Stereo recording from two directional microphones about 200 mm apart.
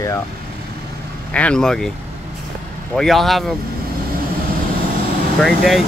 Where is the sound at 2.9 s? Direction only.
Centre (ahead or behind).